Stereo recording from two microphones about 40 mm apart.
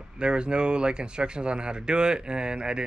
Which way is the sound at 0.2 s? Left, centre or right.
Right.